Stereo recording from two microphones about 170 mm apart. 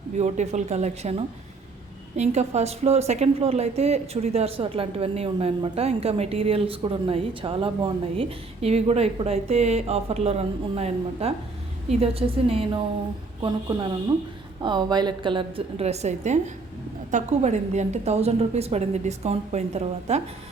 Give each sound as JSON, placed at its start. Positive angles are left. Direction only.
{"t": 0.2, "sound": "a woman's voice", "side_deg": -40}